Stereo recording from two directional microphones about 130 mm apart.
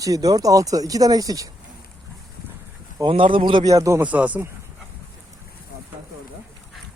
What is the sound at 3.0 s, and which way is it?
Speech, 40° right (ahead or behind).